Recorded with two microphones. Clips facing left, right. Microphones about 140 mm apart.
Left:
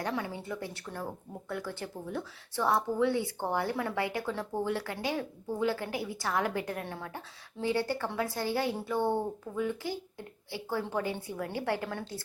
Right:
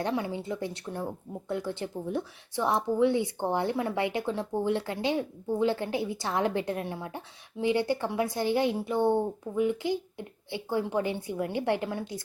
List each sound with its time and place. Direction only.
0.0 s speech: 20° right (ahead or behind)